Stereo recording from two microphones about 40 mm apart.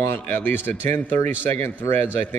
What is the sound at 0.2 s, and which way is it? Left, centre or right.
A man's voice, left.